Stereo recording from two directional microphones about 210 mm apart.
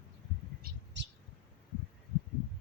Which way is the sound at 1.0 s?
60° right (ahead or behind).